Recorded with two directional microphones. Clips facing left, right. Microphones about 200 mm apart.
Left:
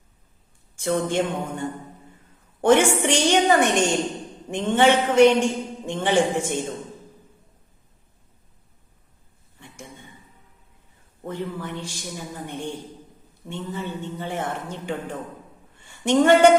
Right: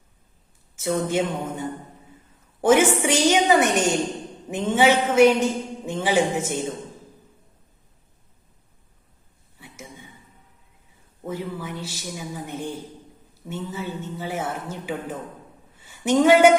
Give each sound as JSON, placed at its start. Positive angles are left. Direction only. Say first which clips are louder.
{"t": 0.8, "sound": "a man's voice", "louder": "even", "side_deg": -10}
{"t": 11.2, "sound": "a man's voice", "louder": "even", "side_deg": -5}